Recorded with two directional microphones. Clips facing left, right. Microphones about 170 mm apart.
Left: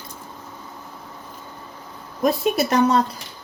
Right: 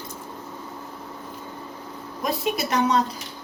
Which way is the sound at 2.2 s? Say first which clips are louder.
Left 6 dB; 50° left (ahead or behind).